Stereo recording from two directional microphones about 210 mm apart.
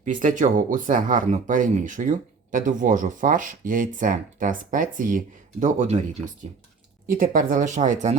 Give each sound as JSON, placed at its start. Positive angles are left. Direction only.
{"t": 0.0, "sound": "speech", "side_deg": -40}
{"t": 7.1, "sound": "speech", "side_deg": -40}